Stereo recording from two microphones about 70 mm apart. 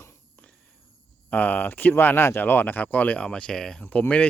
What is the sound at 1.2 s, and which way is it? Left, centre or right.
Speech, left.